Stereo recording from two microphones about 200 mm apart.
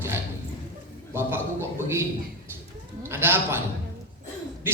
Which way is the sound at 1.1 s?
10° right (ahead or behind).